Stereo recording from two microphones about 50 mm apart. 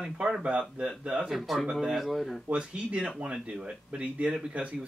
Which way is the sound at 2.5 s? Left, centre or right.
Right.